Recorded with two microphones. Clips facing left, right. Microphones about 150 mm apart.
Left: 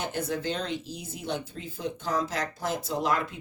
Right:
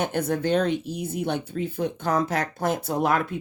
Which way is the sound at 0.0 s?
55° right (ahead or behind).